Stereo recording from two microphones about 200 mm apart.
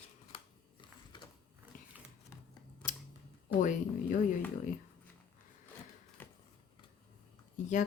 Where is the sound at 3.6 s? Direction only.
40° left (ahead or behind).